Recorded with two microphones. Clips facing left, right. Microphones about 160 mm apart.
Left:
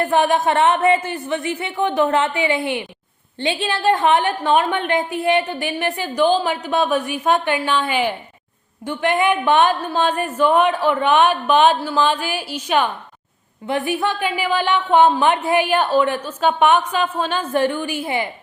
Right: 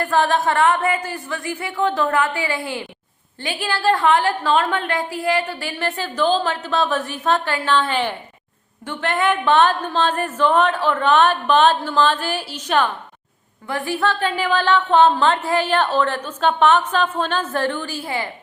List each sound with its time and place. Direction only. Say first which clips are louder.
0.0 s a woman's voice: left 2 dB; 20° left (ahead or behind)